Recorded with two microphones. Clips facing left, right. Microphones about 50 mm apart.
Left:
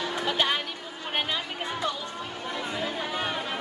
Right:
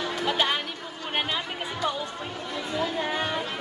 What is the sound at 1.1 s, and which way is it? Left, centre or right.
Speech, centre.